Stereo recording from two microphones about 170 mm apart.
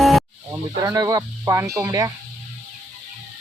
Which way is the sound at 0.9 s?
20° right (ahead or behind).